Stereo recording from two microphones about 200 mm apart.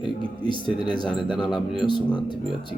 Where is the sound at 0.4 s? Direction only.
25° right (ahead or behind).